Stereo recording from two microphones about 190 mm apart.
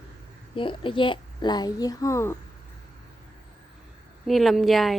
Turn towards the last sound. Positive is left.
turn(degrees=0)  # may be behind; listen again after turning